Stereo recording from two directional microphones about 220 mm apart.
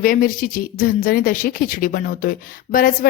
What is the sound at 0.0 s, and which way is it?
A woman's voice, 40° left (ahead or behind).